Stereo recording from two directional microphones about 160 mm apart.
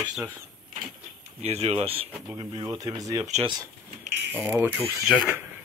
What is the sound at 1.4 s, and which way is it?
Speech, 40° right (ahead or behind).